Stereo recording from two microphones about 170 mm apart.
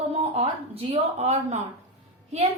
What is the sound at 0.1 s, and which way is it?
A woman's voice, 35° right (ahead or behind).